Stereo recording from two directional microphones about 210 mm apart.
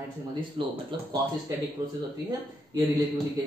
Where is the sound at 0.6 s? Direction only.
25° right (ahead or behind).